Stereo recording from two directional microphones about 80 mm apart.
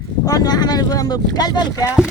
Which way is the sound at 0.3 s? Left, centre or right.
Left.